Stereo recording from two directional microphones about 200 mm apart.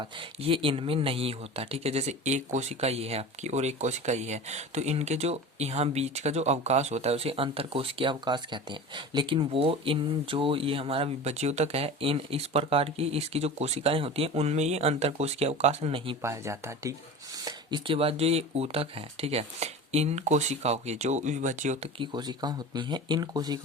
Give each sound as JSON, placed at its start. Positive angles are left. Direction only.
{"t": 0.0, "sound": "speech", "side_deg": -25}
{"t": 16.2, "sound": "speech", "side_deg": -15}
{"t": 21.9, "sound": "speech", "side_deg": -25}